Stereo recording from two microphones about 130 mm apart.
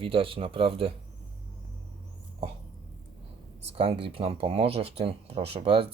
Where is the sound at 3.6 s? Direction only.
50° right (ahead or behind).